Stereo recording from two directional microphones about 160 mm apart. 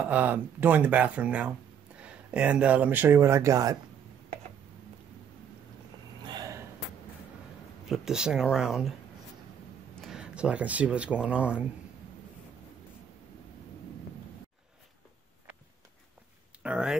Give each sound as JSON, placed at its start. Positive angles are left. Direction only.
{"t": 0.0, "sound": "speech", "side_deg": -10}
{"t": 6.2, "sound": "gasp", "side_deg": -25}
{"t": 7.8, "sound": "speech", "side_deg": -5}
{"t": 10.0, "sound": "speech", "side_deg": -5}
{"t": 16.6, "sound": "speech", "side_deg": -5}